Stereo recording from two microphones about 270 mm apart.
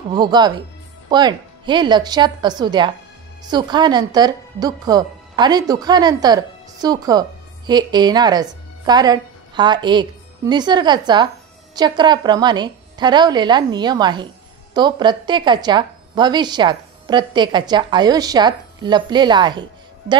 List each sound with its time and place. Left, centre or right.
0.1 s a woman's voice: centre